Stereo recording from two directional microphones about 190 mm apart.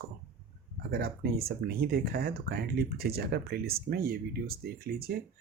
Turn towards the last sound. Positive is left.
turn(degrees=-55)  # may be behind; listen again after turning